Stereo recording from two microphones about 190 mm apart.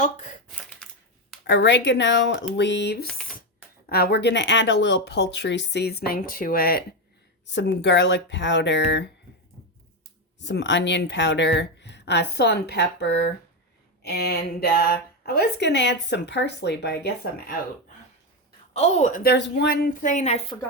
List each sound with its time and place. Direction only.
0.0 s a woman's voice: 40° left (ahead or behind)
1.5 s speech: 65° left (ahead or behind)
7.4 s speech: 65° left (ahead or behind)
10.4 s speech: 70° left (ahead or behind)
18.7 s a woman's voice: 35° left (ahead or behind)
19.2 s speech: 60° left (ahead or behind); by 20.6 s 35° left (ahead or behind)